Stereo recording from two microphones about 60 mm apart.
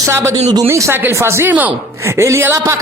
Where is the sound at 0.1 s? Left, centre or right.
Right.